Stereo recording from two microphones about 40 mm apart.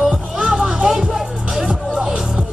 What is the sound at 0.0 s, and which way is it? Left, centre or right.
Music, centre.